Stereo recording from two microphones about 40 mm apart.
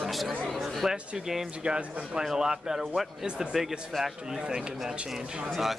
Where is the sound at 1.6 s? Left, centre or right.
Right; by 4.1 s centre.